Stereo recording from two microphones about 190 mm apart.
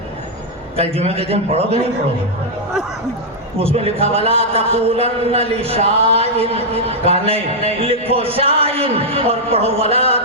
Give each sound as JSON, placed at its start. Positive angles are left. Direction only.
{"t": 0.8, "sound": "a man's voice", "side_deg": -30}
{"t": 3.6, "sound": "a man's voice", "side_deg": -30}